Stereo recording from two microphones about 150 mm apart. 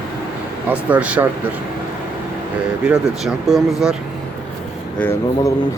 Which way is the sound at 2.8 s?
5° right (ahead or behind).